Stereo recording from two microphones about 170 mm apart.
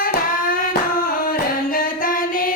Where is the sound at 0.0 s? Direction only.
55° left (ahead or behind).